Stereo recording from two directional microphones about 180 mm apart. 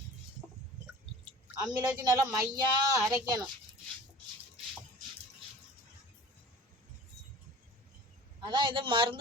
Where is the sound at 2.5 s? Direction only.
20° right (ahead or behind).